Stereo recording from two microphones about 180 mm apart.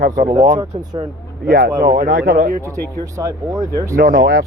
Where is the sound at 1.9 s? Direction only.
50° right (ahead or behind).